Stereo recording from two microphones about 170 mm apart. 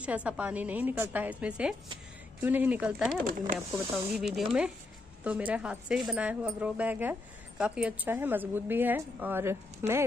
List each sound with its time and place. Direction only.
0.0 s speech: 5° right (ahead or behind)
3.3 s speech: 55° right (ahead or behind)
3.9 s speech: 5° right (ahead or behind)